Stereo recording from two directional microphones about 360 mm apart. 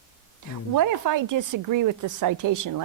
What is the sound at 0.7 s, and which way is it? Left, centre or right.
Speech, right.